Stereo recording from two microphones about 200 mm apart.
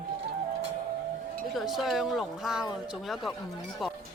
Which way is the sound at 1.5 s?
Centre (ahead or behind).